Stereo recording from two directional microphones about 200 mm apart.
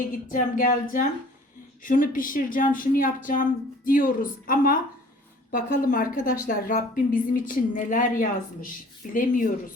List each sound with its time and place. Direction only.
0.0 s a woman's voice: 40° left (ahead or behind)